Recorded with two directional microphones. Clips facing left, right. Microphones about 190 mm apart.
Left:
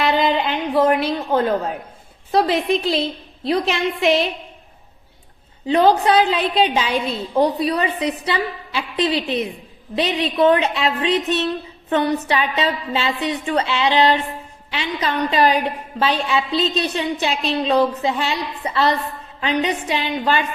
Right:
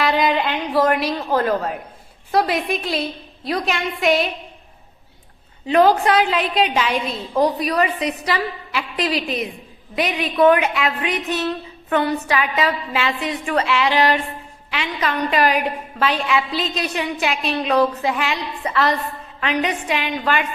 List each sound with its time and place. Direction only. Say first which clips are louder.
0.8 s a woman's voice: left 1 dB; 25° left (ahead or behind)
5.6 s a woman's voice: even; 30° left (ahead or behind)